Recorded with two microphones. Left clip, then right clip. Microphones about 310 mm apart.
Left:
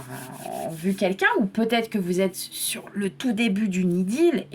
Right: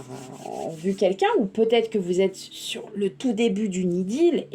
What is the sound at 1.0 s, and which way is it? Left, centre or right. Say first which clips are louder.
Speech: right 3 dB; left.